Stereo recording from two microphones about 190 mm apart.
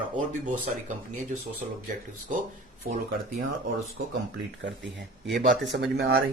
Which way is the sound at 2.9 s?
55° right (ahead or behind).